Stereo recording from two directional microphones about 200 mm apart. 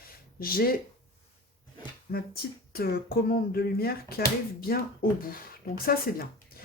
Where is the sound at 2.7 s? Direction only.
50° left (ahead or behind).